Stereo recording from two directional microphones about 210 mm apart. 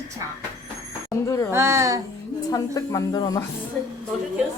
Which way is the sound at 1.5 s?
15° right (ahead or behind).